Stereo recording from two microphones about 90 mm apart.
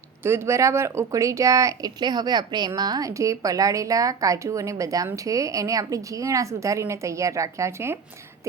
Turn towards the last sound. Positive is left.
turn(degrees=-30)  # may be behind; listen again after turning